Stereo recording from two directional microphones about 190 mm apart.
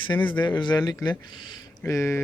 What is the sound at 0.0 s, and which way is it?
Speech, 25° left (ahead or behind).